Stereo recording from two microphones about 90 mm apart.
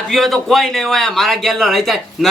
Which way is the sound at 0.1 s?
Centre (ahead or behind).